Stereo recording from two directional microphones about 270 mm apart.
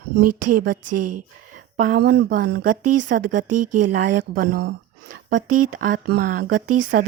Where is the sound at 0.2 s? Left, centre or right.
Right.